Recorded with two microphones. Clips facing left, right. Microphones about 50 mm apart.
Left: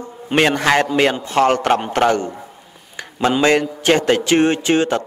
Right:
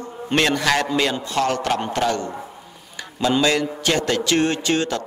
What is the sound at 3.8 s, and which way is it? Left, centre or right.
Speech, left.